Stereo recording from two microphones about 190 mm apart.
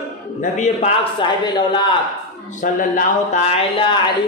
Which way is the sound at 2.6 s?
45° left (ahead or behind).